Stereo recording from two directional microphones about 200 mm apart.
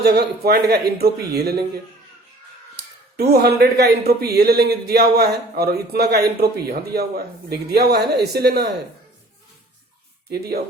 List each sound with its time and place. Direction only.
0.0 s speech: 55° right (ahead or behind)
3.2 s speech: 55° right (ahead or behind)
10.3 s speech: 50° right (ahead or behind)